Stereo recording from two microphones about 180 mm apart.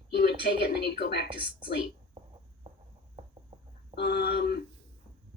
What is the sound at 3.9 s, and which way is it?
Speech, 60° left (ahead or behind).